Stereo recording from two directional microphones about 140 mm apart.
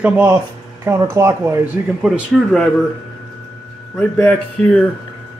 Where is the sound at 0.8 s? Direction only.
20° right (ahead or behind).